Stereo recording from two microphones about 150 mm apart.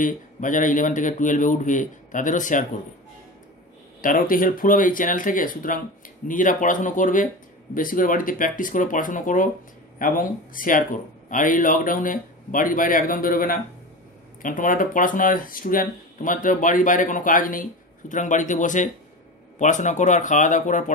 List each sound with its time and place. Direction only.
0.0 s speech: 60° left (ahead or behind)
4.0 s speech: 65° left (ahead or behind)